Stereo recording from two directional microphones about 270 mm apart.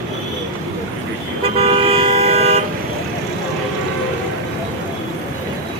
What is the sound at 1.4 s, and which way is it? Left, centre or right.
Toot, right.